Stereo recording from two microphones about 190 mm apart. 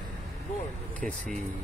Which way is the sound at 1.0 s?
5° left (ahead or behind).